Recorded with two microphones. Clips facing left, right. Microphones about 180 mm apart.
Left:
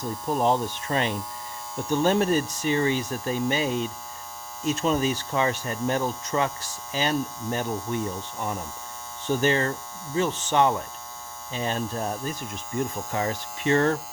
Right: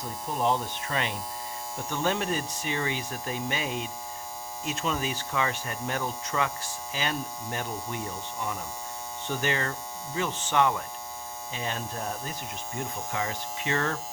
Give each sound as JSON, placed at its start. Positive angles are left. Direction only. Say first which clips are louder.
{"t": 0.4, "sound": "hum", "louder": "left 2 dB", "side_deg": 40}
{"t": 9.4, "sound": "hum", "louder": "left 6 dB", "side_deg": 35}